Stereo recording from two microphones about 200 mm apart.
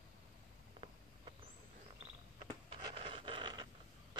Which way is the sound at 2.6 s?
25° right (ahead or behind).